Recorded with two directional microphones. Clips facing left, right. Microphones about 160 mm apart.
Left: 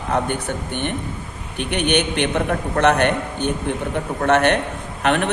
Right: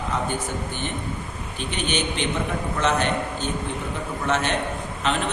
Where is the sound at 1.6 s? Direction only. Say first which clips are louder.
Left 7 dB; 60° left (ahead or behind).